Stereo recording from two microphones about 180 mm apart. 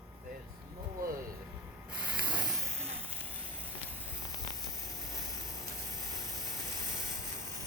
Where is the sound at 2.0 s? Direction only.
5° right (ahead or behind).